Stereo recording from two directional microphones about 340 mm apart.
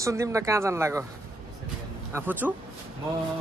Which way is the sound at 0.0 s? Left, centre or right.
Centre.